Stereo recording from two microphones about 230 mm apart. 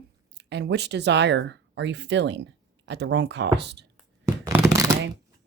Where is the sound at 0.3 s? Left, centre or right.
Right.